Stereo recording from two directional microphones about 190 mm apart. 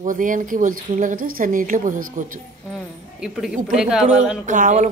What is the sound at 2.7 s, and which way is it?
Speech, 5° right (ahead or behind).